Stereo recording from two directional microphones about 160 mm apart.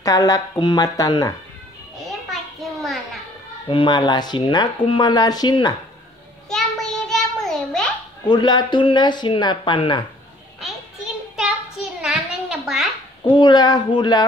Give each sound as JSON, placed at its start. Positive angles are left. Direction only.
{"t": 0.0, "sound": "speech", "side_deg": 20}
{"t": 2.0, "sound": "a sound", "side_deg": 0}
{"t": 3.6, "sound": "speech", "side_deg": 30}
{"t": 6.5, "sound": "child singing", "side_deg": 0}
{"t": 8.3, "sound": "speech", "side_deg": 25}
{"t": 11.3, "sound": "a sound", "side_deg": -5}
{"t": 13.2, "sound": "speech", "side_deg": 30}